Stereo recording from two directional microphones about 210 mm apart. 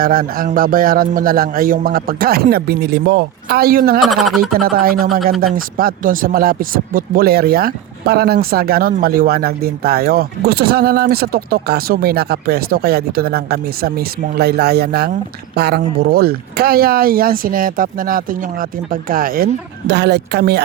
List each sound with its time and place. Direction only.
0.0 s speech: 45° right (ahead or behind)
4.0 s speech: centre (ahead or behind)
4.6 s speech: 45° right (ahead or behind)
19.9 s speech: 55° right (ahead or behind)